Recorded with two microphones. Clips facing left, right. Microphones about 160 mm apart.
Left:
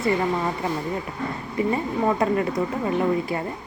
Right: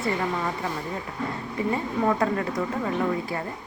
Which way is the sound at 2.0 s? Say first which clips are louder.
Left 3 dB; 15° left (ahead or behind).